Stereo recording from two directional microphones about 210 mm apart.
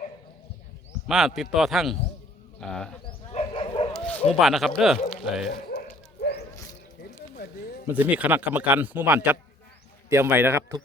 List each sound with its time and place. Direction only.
1.0 s speech: centre (ahead or behind)
3.1 s dog: 25° left (ahead or behind)
3.9 s speech: 5° left (ahead or behind)
5.6 s bow-wow: 45° left (ahead or behind)
7.9 s a man's voice: 10° right (ahead or behind)